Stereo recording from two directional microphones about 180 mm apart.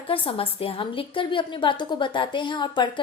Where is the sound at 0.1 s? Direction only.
30° left (ahead or behind).